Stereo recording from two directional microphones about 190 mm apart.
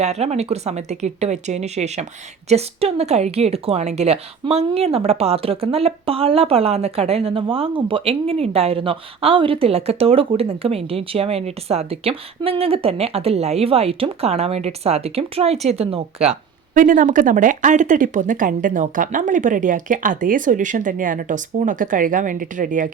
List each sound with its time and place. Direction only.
0.0 s a woman's voice: 35° right (ahead or behind)